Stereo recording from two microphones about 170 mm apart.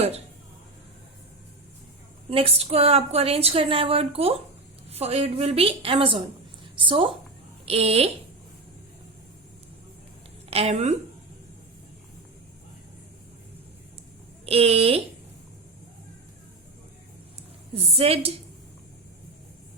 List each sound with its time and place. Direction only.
2.3 s a woman's voice: 35° right (ahead or behind)
10.5 s a woman's voice: 35° right (ahead or behind)
14.4 s a woman's voice: 35° right (ahead or behind)
17.7 s a woman's voice: 35° right (ahead or behind)